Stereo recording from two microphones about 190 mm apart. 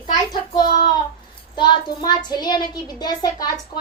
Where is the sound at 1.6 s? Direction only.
25° left (ahead or behind).